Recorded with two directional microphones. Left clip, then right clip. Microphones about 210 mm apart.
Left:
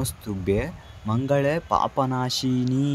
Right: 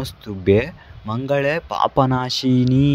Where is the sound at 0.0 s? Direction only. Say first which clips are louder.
Right 6 dB; 30° right (ahead or behind).